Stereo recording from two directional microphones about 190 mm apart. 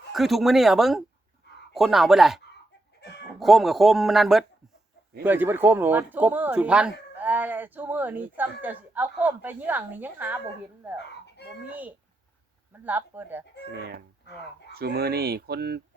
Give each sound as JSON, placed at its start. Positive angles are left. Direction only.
{"t": 0.1, "sound": "speech", "side_deg": 0}
{"t": 3.4, "sound": "speech", "side_deg": 0}
{"t": 11.7, "sound": "speech", "side_deg": -10}
{"t": 13.7, "sound": "speech", "side_deg": -55}